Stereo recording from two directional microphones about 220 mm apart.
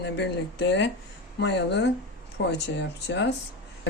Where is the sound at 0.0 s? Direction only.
55° left (ahead or behind).